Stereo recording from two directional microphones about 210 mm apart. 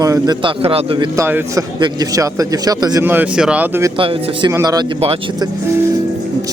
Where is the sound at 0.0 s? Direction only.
20° right (ahead or behind).